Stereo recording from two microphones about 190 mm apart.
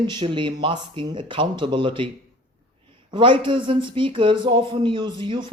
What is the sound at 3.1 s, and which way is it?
A man's voice, 25° right (ahead or behind).